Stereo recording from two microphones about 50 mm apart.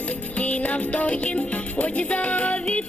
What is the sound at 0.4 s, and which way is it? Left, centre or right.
Music, left.